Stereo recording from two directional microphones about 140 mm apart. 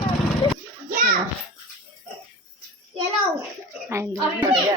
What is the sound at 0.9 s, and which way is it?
Children playing, 90° right.